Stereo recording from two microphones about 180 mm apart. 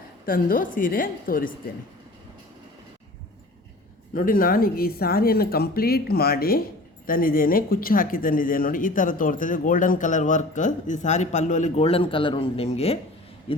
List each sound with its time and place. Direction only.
0.3 s speech: 50° left (ahead or behind)
4.1 s speech: 50° left (ahead or behind); by 13.6 s 30° left (ahead or behind)